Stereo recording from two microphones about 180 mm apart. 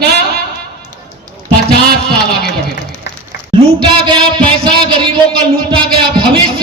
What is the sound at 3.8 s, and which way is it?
Music, 25° right (ahead or behind).